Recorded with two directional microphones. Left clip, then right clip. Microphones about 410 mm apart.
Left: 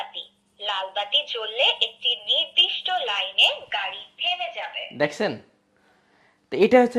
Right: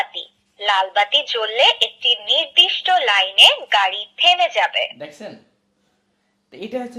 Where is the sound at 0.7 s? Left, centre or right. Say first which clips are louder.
Right 10 dB; right.